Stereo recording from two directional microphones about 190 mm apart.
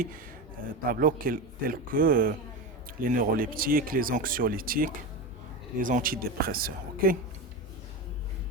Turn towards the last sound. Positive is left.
turn(degrees=-50)  # may be behind; listen again after turning